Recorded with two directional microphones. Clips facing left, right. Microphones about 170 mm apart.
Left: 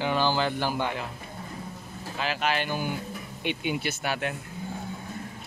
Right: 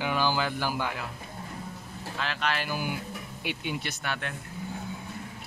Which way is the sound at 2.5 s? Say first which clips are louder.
Left 3 dB; 5° right (ahead or behind).